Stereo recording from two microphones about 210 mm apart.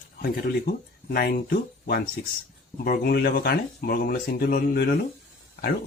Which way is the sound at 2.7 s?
45° left (ahead or behind).